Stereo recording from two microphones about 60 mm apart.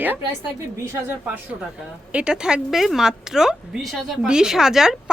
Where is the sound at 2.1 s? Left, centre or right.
Centre.